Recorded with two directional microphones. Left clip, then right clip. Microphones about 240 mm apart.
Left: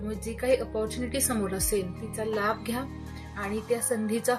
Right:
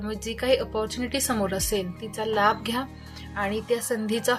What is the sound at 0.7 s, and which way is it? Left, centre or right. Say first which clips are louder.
A woman's voice: right 3 dB; right.